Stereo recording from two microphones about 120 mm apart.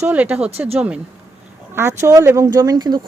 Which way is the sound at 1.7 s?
25° right (ahead or behind).